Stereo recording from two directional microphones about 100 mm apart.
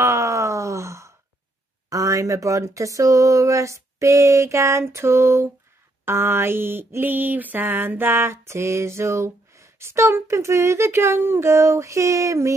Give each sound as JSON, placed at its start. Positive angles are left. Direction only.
{"t": 0.0, "sound": "wail", "side_deg": -30}
{"t": 1.9, "sound": "speech", "side_deg": -35}
{"t": 6.0, "sound": "a sound", "side_deg": -25}